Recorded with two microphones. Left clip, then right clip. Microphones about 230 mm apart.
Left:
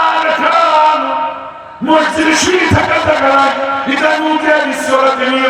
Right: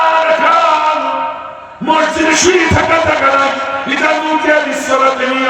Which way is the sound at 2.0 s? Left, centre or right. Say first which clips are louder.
Right 1 dB; left.